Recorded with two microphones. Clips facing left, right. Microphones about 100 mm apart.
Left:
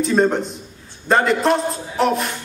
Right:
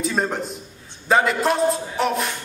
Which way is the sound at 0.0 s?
Centre (ahead or behind).